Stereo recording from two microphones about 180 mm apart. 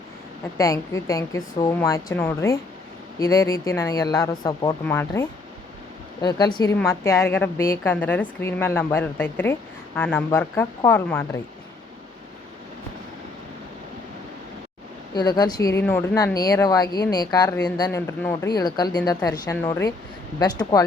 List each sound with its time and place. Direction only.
0.5 s a woman's voice: 15° left (ahead or behind)
6.2 s a woman's voice: 25° left (ahead or behind)
15.1 s speech: 25° left (ahead or behind)